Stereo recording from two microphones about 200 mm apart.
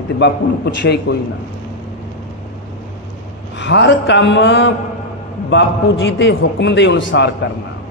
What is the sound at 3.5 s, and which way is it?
Speech, 65° left (ahead or behind).